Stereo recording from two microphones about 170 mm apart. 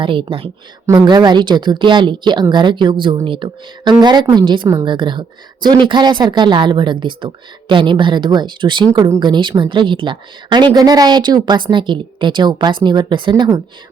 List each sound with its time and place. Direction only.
0.0 s a woman's voice: 30° right (ahead or behind)